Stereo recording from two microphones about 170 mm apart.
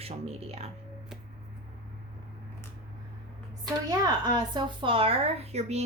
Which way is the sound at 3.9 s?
25° right (ahead or behind).